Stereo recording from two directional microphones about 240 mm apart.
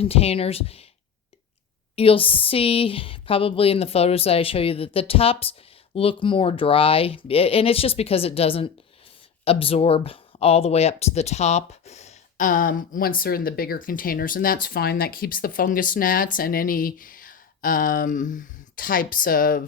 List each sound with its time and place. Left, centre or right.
0.0 s speech: left
2.0 s speech: left